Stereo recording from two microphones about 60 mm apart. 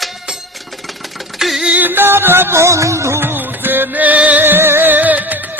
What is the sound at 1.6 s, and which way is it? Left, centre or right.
Music, right.